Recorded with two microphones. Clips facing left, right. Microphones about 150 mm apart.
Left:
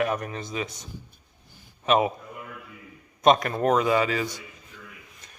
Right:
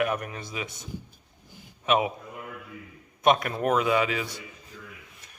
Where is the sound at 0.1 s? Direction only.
10° right (ahead or behind).